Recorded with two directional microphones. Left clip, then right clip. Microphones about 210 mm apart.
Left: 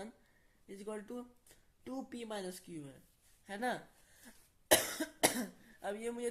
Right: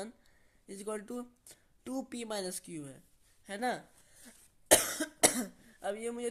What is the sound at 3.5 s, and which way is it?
Speech, 30° right (ahead or behind).